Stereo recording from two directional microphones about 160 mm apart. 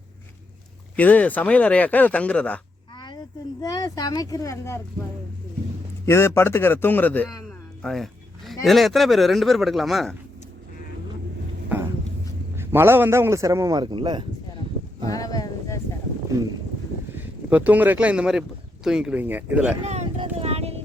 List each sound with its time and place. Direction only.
0.9 s speech: 10° left (ahead or behind)
3.6 s speech: 25° left (ahead or behind)
6.1 s speech: 15° left (ahead or behind)
7.8 s a sound: centre (ahead or behind)
8.6 s speech: centre (ahead or behind)
12.5 s a man's voice: 15° right (ahead or behind); by 14.2 s 30° right (ahead or behind)
15.1 s a sound: 20° left (ahead or behind)
17.2 s speech: 10° right (ahead or behind)
19.8 s speech: 45° right (ahead or behind)
20.1 s a sound: 40° right (ahead or behind)